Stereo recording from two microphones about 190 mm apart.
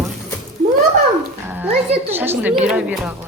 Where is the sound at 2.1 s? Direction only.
10° right (ahead or behind).